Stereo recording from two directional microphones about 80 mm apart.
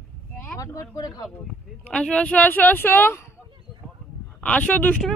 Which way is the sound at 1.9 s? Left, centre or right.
Centre.